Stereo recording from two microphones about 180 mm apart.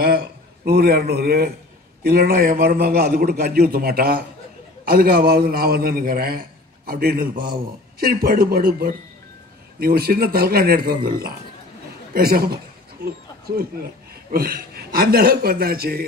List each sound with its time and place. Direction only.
0.7 s a man's voice: 60° right (ahead or behind)
13.0 s a sound: 60° right (ahead or behind)
14.3 s a man's voice: 55° right (ahead or behind)